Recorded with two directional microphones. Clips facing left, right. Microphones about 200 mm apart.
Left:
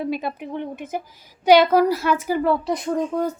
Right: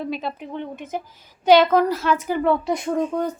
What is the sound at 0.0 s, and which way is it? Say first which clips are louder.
A woman's voice: left 2 dB; 10° left (ahead or behind).